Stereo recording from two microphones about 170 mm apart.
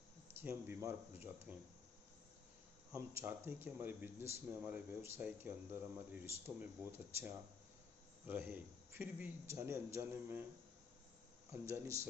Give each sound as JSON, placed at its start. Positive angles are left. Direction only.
{"t": 0.3, "sound": "speech", "side_deg": -15}
{"t": 2.9, "sound": "speech", "side_deg": -15}
{"t": 8.3, "sound": "speech", "side_deg": -10}
{"t": 11.5, "sound": "speech", "side_deg": -15}